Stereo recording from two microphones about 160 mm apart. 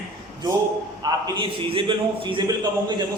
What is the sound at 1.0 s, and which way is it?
Speech, 30° right (ahead or behind).